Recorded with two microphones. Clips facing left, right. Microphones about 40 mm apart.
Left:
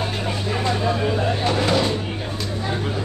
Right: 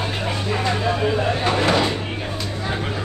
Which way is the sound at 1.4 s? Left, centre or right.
Right.